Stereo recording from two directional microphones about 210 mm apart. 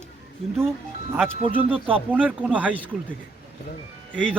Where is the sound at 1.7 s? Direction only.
25° right (ahead or behind).